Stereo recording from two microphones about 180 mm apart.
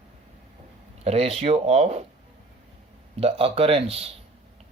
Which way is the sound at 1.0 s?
35° right (ahead or behind).